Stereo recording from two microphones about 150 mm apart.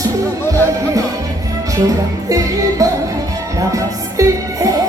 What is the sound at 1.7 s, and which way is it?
Music, 20° right (ahead or behind).